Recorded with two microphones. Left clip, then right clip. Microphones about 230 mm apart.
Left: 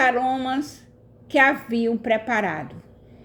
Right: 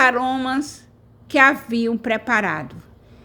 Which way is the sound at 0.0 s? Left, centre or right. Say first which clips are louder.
Right 3 dB; right.